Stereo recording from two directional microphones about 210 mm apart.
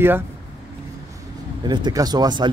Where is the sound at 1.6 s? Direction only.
20° right (ahead or behind).